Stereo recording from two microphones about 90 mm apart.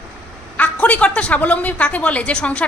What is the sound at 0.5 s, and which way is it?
A woman's voice, 15° left (ahead or behind).